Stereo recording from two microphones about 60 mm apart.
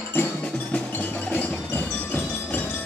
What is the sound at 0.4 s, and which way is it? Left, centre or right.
Music, centre.